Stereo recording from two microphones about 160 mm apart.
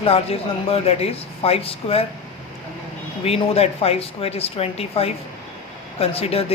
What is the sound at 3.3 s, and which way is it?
Speech, 40° left (ahead or behind).